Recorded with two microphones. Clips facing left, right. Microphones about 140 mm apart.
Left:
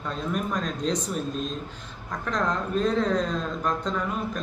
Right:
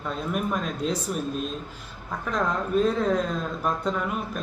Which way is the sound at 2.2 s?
5° right (ahead or behind).